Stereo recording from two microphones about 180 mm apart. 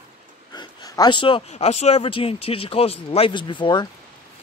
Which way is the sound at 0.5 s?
20° left (ahead or behind).